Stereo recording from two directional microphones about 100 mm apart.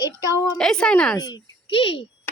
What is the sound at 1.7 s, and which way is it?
Speech, 65° left (ahead or behind).